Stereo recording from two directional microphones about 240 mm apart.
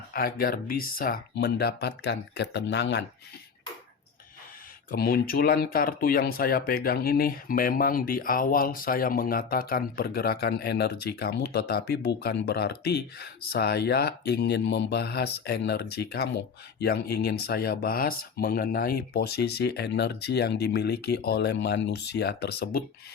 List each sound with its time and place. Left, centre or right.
0.1 s speech: left
4.9 s speech: left